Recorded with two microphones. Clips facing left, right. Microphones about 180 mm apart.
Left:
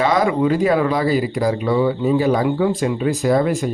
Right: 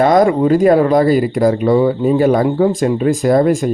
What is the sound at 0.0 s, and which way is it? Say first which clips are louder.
Speech: right 6 dB; 50° right (ahead or behind).